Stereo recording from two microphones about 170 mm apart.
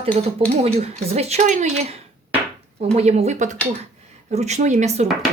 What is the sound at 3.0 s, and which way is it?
A woman's voice, 40° right (ahead or behind).